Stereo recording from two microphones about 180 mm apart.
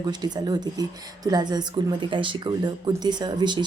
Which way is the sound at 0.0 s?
25° right (ahead or behind).